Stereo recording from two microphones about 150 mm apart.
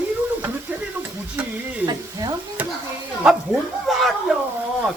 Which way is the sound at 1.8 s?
25° right (ahead or behind).